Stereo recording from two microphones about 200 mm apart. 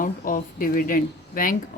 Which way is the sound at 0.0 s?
45° left (ahead or behind).